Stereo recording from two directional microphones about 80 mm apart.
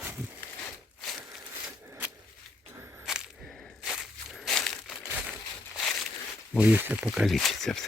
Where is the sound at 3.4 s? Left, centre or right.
Centre.